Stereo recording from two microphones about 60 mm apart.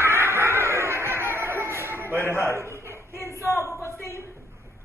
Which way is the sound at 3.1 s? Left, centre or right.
Left.